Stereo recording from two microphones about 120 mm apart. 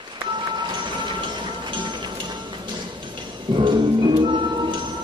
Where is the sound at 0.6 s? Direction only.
40° right (ahead or behind).